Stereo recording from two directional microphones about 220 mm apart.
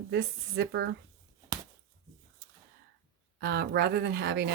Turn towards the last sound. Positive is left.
turn(degrees=-50)  # may be behind; listen again after turning